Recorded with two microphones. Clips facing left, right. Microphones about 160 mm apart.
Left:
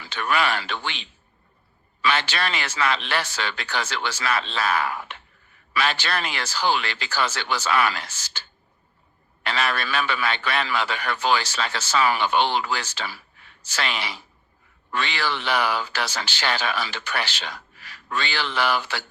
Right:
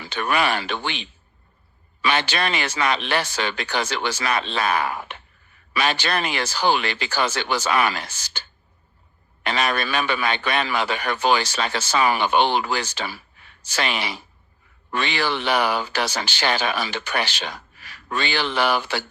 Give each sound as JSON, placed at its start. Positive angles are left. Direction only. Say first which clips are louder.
{"t": 0.0, "sound": "speech", "louder": "right 2 dB", "side_deg": -20}
{"t": 2.0, "sound": "speech", "louder": "right 2 dB", "side_deg": -15}